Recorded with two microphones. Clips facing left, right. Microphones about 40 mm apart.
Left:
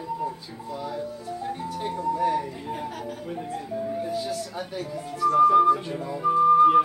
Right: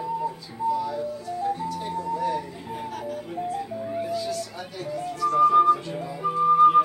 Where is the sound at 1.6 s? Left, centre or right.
Left.